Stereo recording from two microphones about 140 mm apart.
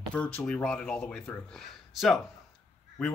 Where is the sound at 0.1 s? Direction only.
10° left (ahead or behind).